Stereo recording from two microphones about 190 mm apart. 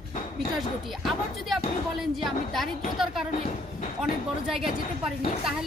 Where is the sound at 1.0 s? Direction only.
Centre (ahead or behind).